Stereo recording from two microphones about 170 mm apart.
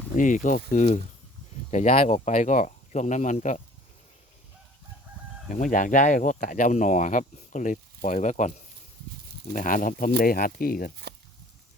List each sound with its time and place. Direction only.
0.2 s speech: 50° left (ahead or behind)
5.5 s speech: 50° left (ahead or behind)